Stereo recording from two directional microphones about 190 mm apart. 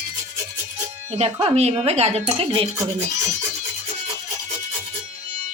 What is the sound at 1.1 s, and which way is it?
Speech, 35° right (ahead or behind).